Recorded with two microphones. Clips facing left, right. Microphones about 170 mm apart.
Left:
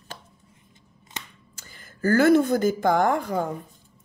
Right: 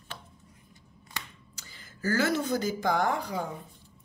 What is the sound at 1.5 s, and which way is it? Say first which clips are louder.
Speech: left 3 dB; 50° left (ahead or behind).